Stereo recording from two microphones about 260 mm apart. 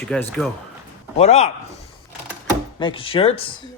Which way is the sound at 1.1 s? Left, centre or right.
Left.